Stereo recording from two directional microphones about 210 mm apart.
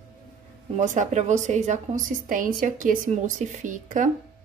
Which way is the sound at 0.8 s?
35° right (ahead or behind).